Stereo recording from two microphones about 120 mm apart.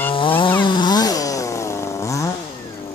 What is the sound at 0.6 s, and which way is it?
Chainsaw, 40° left (ahead or behind).